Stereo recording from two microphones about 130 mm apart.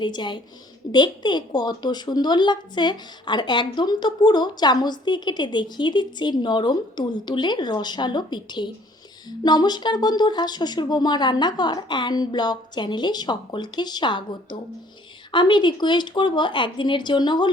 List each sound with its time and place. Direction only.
0.0 s speech: 35° left (ahead or behind)
15.3 s speech: 35° left (ahead or behind)